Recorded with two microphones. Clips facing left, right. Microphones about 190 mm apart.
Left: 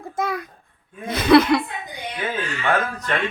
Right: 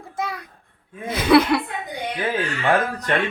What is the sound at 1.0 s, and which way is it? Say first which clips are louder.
Speech: left 1 dB; 5° right (ahead or behind).